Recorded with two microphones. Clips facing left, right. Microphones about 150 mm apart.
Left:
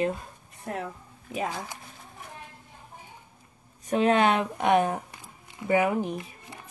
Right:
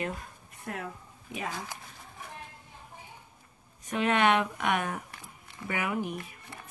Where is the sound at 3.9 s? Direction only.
35° left (ahead or behind).